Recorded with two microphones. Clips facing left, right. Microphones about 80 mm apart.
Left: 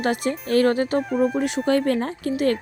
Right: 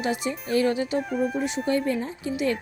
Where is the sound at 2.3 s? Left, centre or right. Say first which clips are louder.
Left 4 dB; left.